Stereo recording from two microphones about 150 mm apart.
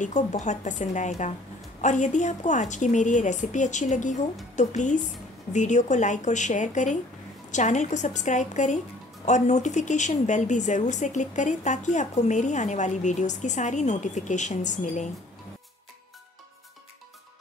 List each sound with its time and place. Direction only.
0.0 s speech: 55° left (ahead or behind)